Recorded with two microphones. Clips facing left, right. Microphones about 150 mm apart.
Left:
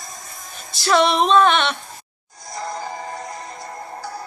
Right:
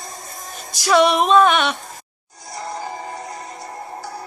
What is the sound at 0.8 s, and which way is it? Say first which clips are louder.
Female singing: right 2 dB; 5° right (ahead or behind).